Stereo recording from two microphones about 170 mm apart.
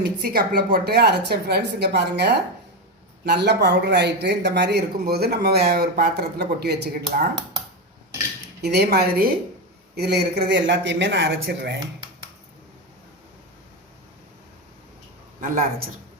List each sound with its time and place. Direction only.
0.0 s speech: 65° right (ahead or behind)
8.6 s speech: 70° right (ahead or behind)
15.4 s a man's voice: 55° right (ahead or behind)